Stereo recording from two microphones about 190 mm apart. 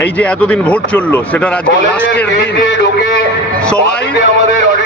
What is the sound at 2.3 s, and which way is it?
Speech, 60° left (ahead or behind).